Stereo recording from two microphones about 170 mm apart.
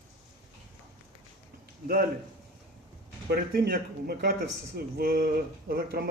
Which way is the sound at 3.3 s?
65° right (ahead or behind).